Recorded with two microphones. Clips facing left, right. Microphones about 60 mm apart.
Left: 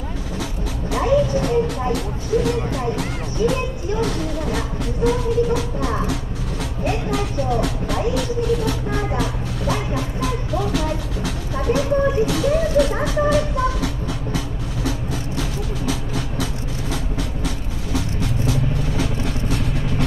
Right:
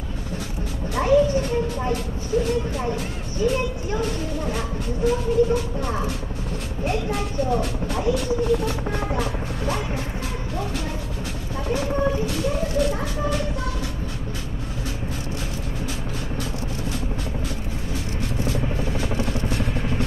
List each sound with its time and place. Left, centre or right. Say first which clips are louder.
0.9 s speech: even; left
4.0 s speech: left 5 dB; left
18.5 s vehicle: left 3 dB; left